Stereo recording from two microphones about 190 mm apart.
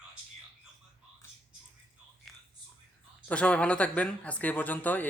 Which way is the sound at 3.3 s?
5° left (ahead or behind).